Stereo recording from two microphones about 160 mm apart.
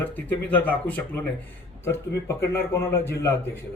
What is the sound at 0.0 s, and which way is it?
A man's voice, 10° left (ahead or behind).